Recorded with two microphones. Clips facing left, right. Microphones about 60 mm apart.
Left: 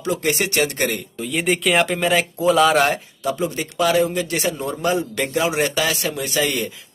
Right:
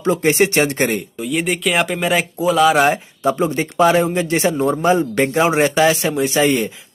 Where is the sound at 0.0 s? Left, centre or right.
Right.